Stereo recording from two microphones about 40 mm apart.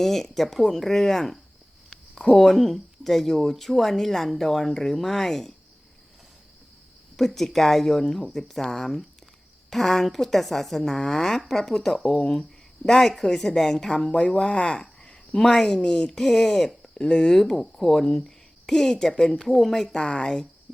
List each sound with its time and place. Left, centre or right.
0.0 s a woman's voice: centre
7.2 s a woman's voice: centre
14.1 s a woman's voice: centre
16.0 s a woman's voice: centre
17.0 s a woman's voice: centre
19.9 s speech: left
20.7 s cricket: left